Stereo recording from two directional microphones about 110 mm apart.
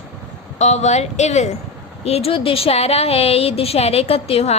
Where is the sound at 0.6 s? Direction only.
90° left.